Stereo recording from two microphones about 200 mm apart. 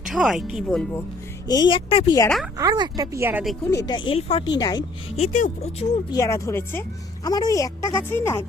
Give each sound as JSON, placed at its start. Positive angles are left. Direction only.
{"t": 0.0, "sound": "speech", "side_deg": 0}
{"t": 1.5, "sound": "speech", "side_deg": 20}
{"t": 2.6, "sound": "speech", "side_deg": -20}
{"t": 3.7, "sound": "speech", "side_deg": 20}
{"t": 5.1, "sound": "speech", "side_deg": 35}
{"t": 6.1, "sound": "speech", "side_deg": 15}